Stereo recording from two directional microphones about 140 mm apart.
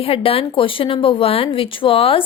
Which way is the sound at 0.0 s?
40° left (ahead or behind).